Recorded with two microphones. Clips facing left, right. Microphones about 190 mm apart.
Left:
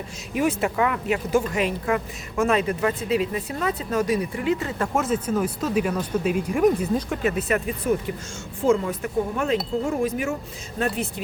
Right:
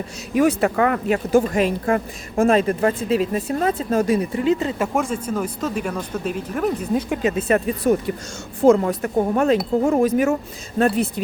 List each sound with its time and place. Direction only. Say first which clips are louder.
0.3 s speech: right 5 dB; 40° right (ahead or behind)
3.8 s speech: right 4 dB; 30° right (ahead or behind)
4.8 s speech: right 1 dB; 5° left (ahead or behind)
7.1 s speech: right 4 dB; 20° right (ahead or behind)
7.9 s a woman's voice: right 4 dB; 40° right (ahead or behind)